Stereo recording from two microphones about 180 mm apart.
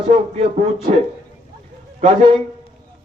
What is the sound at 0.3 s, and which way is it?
Speech, 45° right (ahead or behind).